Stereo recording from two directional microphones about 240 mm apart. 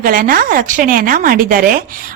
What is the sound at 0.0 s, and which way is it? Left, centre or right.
A woman's voice, right.